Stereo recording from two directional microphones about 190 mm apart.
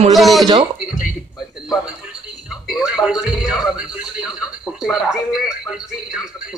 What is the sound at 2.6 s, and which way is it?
A man's voice, 5° right (ahead or behind).